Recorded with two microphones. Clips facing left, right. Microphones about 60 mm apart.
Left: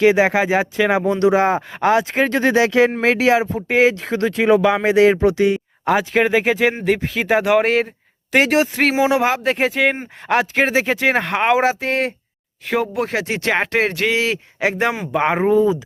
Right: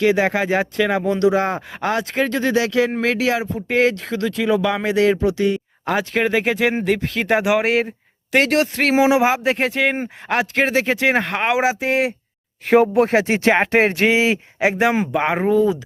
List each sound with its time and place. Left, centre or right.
0.0 s speech: left
0.3 s speech: centre
1.4 s speech: centre
2.3 s speech: left
3.7 s speech: centre
4.1 s speech: left
5.8 s speech: centre
9.0 s speech: centre
12.7 s speech: right
15.1 s speech: centre